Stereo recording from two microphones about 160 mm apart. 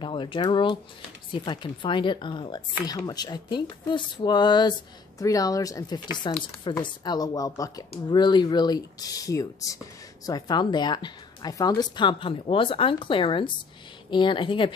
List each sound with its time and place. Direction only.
0.0 s a woman's voice: 30° left (ahead or behind)